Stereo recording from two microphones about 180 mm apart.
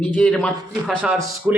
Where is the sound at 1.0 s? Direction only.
5° right (ahead or behind).